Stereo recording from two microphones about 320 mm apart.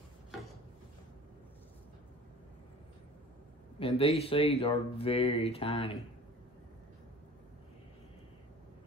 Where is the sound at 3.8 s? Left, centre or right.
Centre.